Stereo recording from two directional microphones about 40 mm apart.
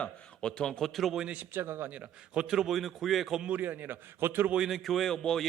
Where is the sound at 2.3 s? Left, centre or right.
Centre.